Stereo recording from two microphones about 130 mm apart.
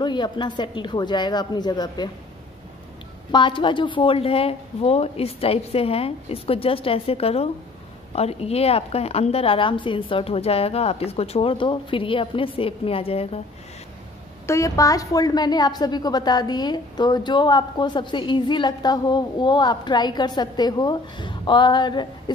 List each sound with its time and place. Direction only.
0.0 s a woman's voice: 35° left (ahead or behind)
3.3 s a woman's voice: 40° left (ahead or behind)
14.4 s a woman's voice: 25° left (ahead or behind)